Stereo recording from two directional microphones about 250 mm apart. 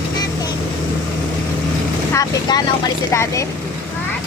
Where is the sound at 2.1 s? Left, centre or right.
Centre.